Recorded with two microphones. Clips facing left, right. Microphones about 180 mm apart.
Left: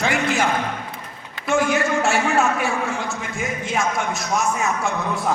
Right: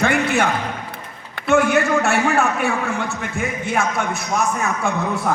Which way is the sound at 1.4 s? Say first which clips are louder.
Right 4 dB; 60° right (ahead or behind).